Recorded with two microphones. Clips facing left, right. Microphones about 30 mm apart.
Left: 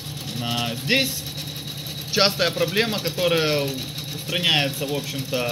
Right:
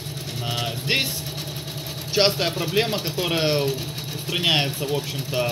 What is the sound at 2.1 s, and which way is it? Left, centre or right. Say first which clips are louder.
Speech: left 1 dB; centre.